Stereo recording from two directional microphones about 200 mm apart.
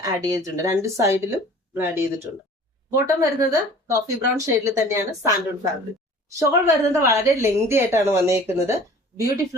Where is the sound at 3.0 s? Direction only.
15° right (ahead or behind).